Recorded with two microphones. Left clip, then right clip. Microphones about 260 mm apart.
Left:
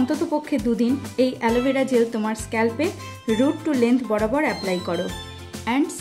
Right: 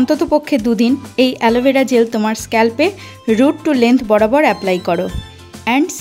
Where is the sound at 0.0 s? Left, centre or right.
Right.